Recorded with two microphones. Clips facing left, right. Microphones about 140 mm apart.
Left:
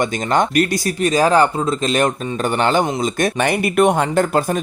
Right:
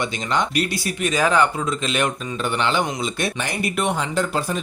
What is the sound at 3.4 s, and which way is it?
Speech, 60° left (ahead or behind).